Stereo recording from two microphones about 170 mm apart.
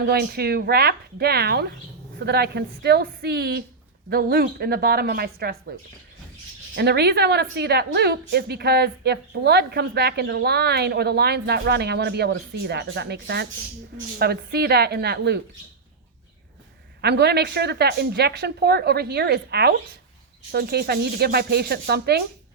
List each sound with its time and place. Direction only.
0.0 s a woman's voice: 65° right (ahead or behind)
6.7 s a woman's voice: 70° right (ahead or behind)
17.0 s a woman's voice: 75° right (ahead or behind)